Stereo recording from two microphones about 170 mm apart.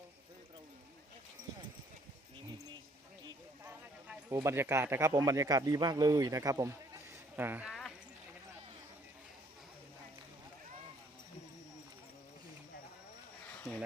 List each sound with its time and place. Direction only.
3.6 s clip-clop: 10° right (ahead or behind)
4.4 s speech: 15° right (ahead or behind)